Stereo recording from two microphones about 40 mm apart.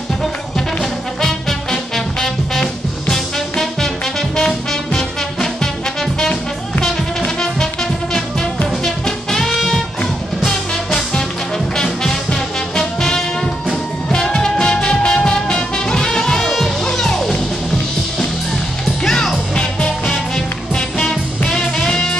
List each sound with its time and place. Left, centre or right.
1.2 s music: centre
6.8 s music: centre
8.8 s music: centre
14.2 s music: centre
19.0 s music: centre
21.5 s music: centre